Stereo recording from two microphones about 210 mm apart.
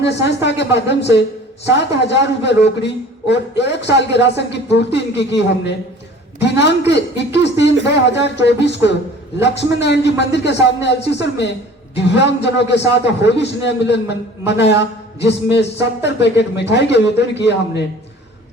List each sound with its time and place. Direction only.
0.0 s a man's voice: 55° left (ahead or behind)